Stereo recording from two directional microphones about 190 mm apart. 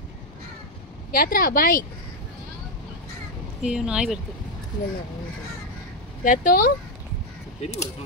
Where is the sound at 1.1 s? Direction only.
50° left (ahead or behind).